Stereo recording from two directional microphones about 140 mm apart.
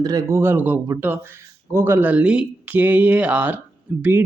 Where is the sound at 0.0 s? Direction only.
25° right (ahead or behind).